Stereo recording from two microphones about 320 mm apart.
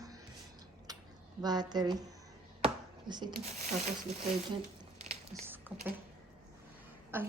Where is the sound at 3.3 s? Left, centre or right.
Right.